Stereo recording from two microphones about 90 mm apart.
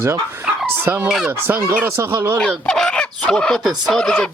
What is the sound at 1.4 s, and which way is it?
Speech, 25° right (ahead or behind).